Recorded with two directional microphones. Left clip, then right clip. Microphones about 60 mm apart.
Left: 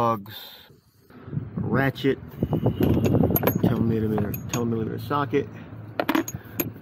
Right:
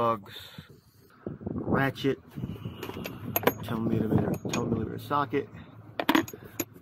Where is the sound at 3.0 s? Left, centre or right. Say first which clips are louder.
Left 12 dB; centre.